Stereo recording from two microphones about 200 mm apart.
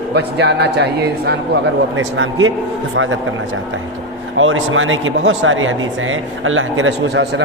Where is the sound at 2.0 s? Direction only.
75° right (ahead or behind).